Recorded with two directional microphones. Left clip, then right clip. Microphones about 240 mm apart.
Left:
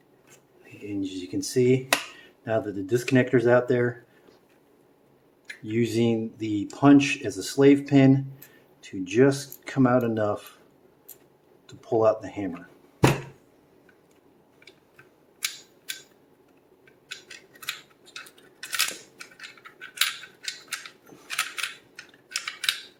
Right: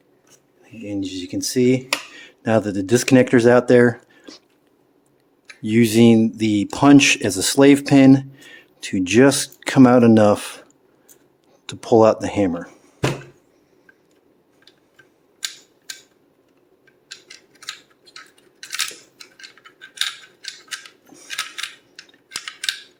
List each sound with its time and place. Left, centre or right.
0.9 s speech: right
5.6 s speech: right
11.6 s speech: right